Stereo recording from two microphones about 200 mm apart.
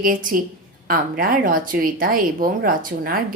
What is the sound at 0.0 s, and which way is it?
A woman's voice, 45° right (ahead or behind).